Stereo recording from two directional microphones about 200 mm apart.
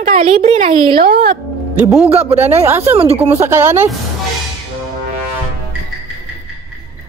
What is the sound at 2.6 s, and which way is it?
Speech, 10° right (ahead or behind).